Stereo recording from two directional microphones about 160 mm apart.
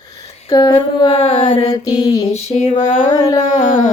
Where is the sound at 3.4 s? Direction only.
50° left (ahead or behind).